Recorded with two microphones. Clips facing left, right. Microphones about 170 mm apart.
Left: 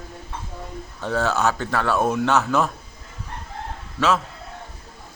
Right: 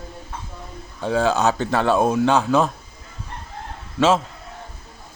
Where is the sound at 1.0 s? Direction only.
15° right (ahead or behind).